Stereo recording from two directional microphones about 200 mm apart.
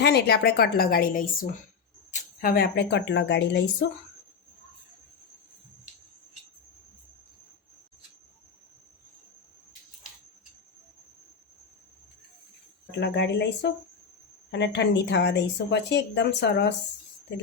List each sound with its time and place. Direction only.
0.0 s a woman's voice: 55° left (ahead or behind)
13.0 s speech: 60° left (ahead or behind)